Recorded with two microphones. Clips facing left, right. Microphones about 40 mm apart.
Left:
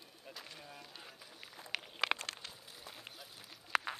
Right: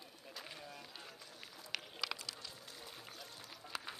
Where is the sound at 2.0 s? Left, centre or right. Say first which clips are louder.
Left 7 dB; left.